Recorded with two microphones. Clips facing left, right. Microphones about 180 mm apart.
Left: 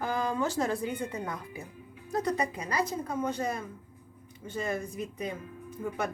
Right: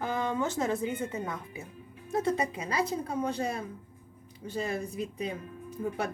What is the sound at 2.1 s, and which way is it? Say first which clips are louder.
Speech: right 1 dB; 25° right (ahead or behind).